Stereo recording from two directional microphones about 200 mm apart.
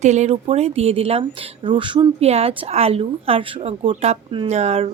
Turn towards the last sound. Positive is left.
turn(degrees=-30)  # may be behind; listen again after turning